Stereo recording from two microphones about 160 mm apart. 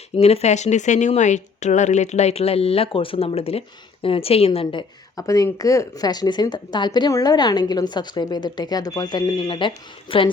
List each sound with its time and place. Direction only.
0.2 s a woman's voice: 40° left (ahead or behind)